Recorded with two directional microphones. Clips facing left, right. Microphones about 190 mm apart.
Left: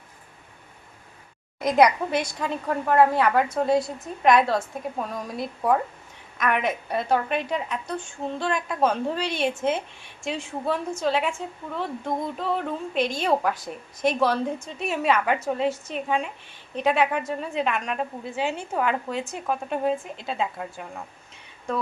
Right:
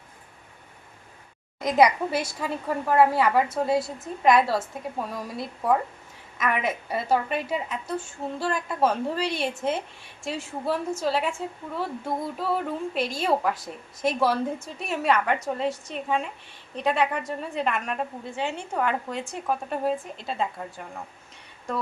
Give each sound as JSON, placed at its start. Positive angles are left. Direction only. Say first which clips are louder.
{"t": 1.6, "sound": "a woman's voice", "louder": "left 1 dB", "side_deg": 0}
{"t": 6.3, "sound": "a woman's voice", "louder": "left 2 dB", "side_deg": -5}